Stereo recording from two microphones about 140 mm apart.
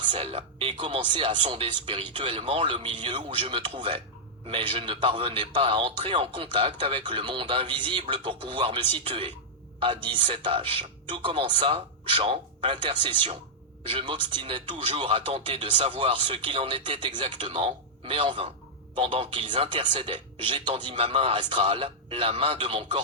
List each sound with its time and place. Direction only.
0.0 s speech: 40° right (ahead or behind)